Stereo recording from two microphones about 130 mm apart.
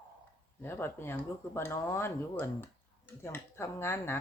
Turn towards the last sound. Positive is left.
turn(degrees=20)  # may be behind; listen again after turning